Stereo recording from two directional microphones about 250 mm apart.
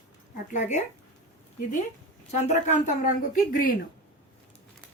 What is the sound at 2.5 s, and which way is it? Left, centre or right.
Speech, left.